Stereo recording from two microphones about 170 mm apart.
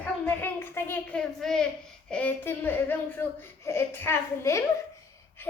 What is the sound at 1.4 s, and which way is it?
A child's voice, centre (ahead or behind).